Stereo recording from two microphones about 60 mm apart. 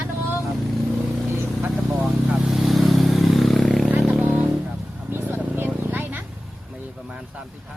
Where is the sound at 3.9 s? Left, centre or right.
Centre.